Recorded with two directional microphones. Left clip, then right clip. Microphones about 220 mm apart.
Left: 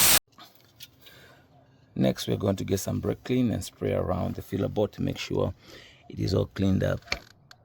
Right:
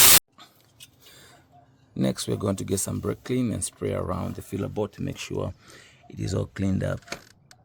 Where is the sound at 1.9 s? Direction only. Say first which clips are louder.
Left 1 dB; 5° left (ahead or behind).